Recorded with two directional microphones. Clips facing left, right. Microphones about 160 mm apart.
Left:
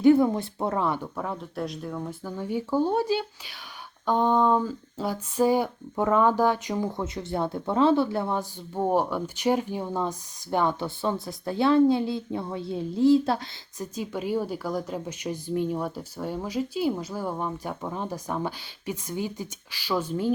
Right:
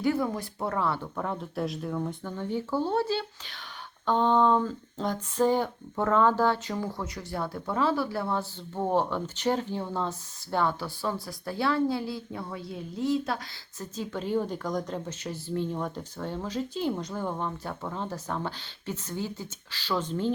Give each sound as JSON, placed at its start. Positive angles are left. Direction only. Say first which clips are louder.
{"t": 0.0, "sound": "speech", "louder": "left 8 dB", "side_deg": 25}
{"t": 13.7, "sound": "speech", "louder": "left 3 dB", "side_deg": 15}